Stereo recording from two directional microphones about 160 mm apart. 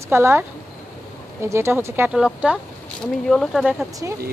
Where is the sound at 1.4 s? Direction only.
15° right (ahead or behind).